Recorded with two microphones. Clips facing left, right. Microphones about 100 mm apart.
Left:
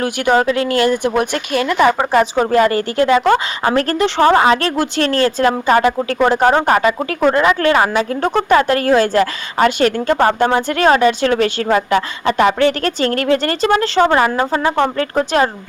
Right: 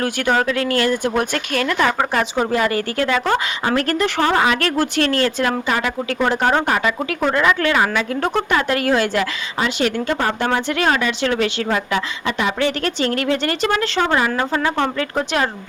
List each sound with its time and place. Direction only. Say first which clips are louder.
0.0 s speech: left 4 dB; 15° left (ahead or behind)
2.4 s a woman's voice: left 5 dB; 40° left (ahead or behind); by 3.4 s 20° left (ahead or behind)
3.6 s a woman's voice: left 3 dB; 40° left (ahead or behind)
9.6 s speech: left 6 dB; 50° left (ahead or behind)
10.7 s a woman's voice: left 6 dB; 40° left (ahead or behind)